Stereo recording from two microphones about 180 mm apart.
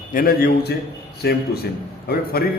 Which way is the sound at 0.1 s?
55° left (ahead or behind).